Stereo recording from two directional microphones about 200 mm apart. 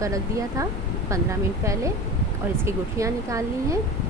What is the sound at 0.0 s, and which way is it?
Speech, 15° right (ahead or behind).